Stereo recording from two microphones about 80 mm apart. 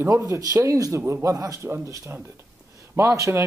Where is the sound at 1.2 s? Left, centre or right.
Right.